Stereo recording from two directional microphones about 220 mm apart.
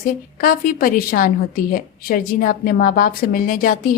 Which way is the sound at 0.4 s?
40° left (ahead or behind).